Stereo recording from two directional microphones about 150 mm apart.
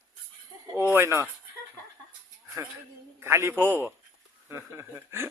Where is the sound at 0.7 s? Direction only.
15° right (ahead or behind).